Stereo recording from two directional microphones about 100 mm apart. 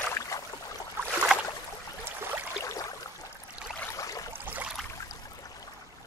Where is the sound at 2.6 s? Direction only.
35° left (ahead or behind).